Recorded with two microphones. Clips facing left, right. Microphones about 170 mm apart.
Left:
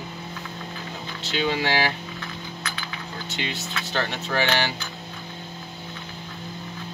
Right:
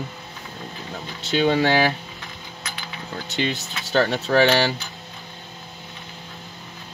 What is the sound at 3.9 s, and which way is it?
Speech, 35° right (ahead or behind).